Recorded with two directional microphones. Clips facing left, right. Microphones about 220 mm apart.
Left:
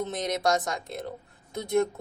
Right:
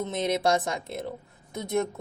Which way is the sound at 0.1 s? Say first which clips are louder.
Right 4 dB; 30° right (ahead or behind).